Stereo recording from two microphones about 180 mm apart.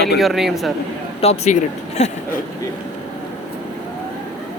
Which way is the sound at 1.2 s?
35° left (ahead or behind).